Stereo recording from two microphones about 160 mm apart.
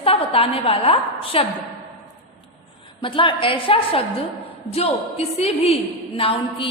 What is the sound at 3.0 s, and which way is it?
A woman's voice, 30° left (ahead or behind).